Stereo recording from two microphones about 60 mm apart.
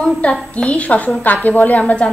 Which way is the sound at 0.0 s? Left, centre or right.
Centre.